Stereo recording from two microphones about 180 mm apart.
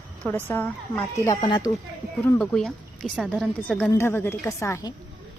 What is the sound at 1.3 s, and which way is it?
Speech, 25° left (ahead or behind).